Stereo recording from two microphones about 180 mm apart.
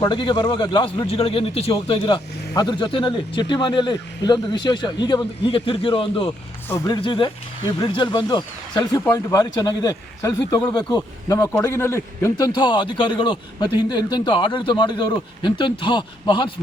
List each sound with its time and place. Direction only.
0.0 s speech: 25° left (ahead or behind)
6.7 s speech: 20° left (ahead or behind)